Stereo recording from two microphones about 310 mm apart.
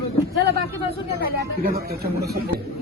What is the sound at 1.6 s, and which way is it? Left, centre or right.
Speech, right.